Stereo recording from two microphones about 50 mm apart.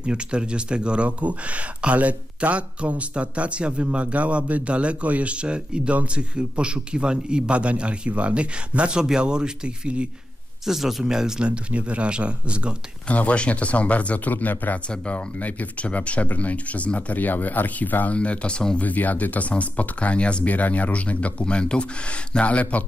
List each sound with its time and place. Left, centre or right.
0.0 s speech: centre
10.6 s speech: centre
11.4 s speech: right
13.1 s speech: left
18.8 s speech: left